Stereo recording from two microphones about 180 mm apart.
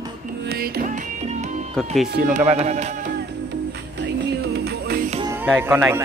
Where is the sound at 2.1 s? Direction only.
45° right (ahead or behind).